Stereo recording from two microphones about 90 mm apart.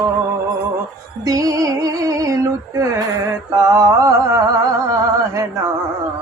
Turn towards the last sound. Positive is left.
turn(degrees=-40)  # may be behind; listen again after turning